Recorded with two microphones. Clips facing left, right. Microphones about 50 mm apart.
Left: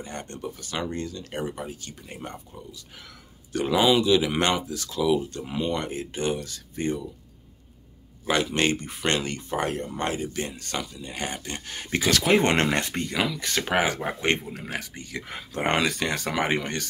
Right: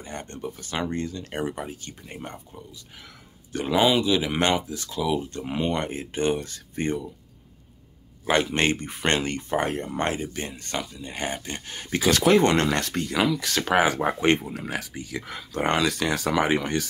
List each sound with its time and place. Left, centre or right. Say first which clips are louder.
0.0 s speech: right 1 dB; centre
0.6 s speech: right 3 dB; right
5.4 s speech: right 2 dB; right
8.3 s speech: right 1 dB; right
9.9 s speech: right 5 dB; right
10.2 s speech: left 2 dB; centre
12.4 s speech: right 2 dB; left
12.7 s speech: even; centre
13.1 s speech: right 4 dB; centre
15.6 s speech: right 1 dB; centre